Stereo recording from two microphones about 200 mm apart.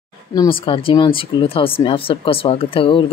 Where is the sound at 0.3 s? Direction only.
20° left (ahead or behind).